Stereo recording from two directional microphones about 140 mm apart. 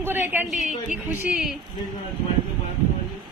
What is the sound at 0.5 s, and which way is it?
Speech, 65° left (ahead or behind).